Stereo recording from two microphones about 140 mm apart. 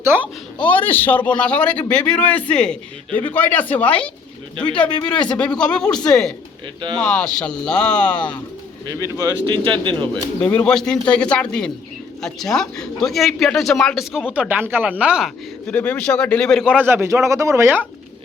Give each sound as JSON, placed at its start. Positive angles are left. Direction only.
{"t": 0.0, "sound": "a man's voice", "side_deg": -15}
{"t": 0.6, "sound": "a man's voice", "side_deg": 15}
{"t": 8.9, "sound": "speech", "side_deg": -25}
{"t": 10.5, "sound": "a man's voice", "side_deg": 10}
{"t": 15.6, "sound": "a man's voice", "side_deg": 10}
{"t": 16.7, "sound": "a man's voice", "side_deg": -15}